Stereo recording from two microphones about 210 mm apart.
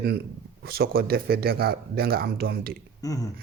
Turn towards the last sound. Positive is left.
turn(degrees=15)  # may be behind; listen again after turning